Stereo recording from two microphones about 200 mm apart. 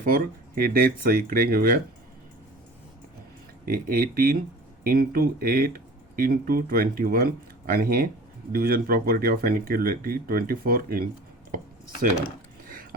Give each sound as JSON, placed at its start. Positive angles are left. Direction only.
{"t": 0.0, "sound": "speech", "side_deg": -45}
{"t": 3.7, "sound": "speech", "side_deg": -45}
{"t": 11.5, "sound": "a sound", "side_deg": -45}